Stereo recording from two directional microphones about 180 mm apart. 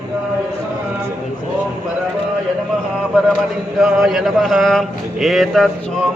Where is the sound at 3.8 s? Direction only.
Centre (ahead or behind).